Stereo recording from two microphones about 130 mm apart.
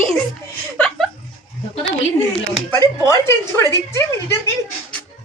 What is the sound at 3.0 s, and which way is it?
A woman's voice, 25° left (ahead or behind).